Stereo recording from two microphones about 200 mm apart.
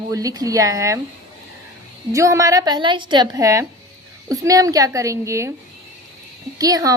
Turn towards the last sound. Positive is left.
turn(degrees=-15)  # may be behind; listen again after turning